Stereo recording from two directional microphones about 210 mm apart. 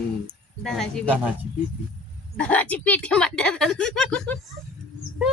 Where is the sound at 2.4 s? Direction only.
5° left (ahead or behind).